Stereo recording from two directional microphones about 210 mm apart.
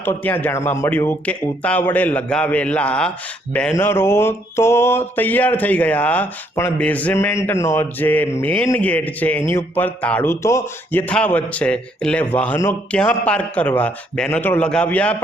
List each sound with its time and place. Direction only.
0.0 s mantra: 10° left (ahead or behind)